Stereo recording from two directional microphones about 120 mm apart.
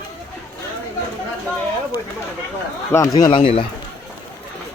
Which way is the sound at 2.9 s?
30° left (ahead or behind).